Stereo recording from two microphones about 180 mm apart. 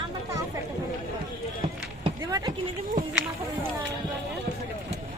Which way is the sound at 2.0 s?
20° right (ahead or behind).